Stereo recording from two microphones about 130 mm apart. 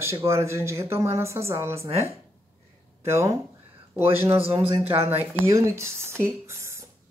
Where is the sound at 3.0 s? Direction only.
20° right (ahead or behind).